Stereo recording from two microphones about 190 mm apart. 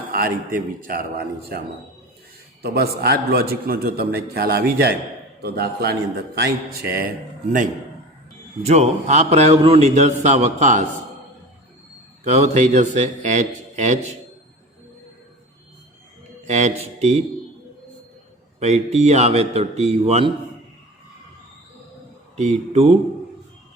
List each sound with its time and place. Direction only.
0.1 s a man's voice: 50° right (ahead or behind)
8.6 s speech: 35° right (ahead or behind)
12.2 s speech: 35° right (ahead or behind)
16.5 s speech: 40° right (ahead or behind)
18.6 s speech: 35° right (ahead or behind)
22.4 s speech: 35° right (ahead or behind)